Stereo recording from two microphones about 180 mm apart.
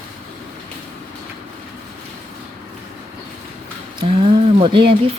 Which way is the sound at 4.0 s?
30° right (ahead or behind).